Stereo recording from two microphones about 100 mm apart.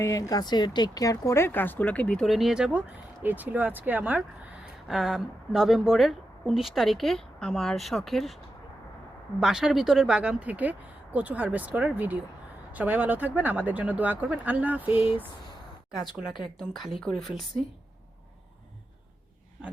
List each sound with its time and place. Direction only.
0.0 s speech: 35° left (ahead or behind); by 2.3 s 10° left (ahead or behind)
2.3 s speech: 5° right (ahead or behind)
4.9 s speech: 5° right (ahead or behind)
9.4 s speech: 5° right (ahead or behind)
16.6 s speech: centre (ahead or behind)